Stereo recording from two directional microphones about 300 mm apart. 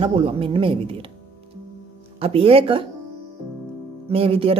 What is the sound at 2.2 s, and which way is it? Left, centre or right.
Speech, centre.